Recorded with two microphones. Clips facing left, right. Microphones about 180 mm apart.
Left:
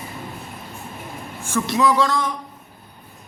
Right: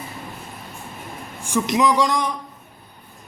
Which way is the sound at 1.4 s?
15° right (ahead or behind).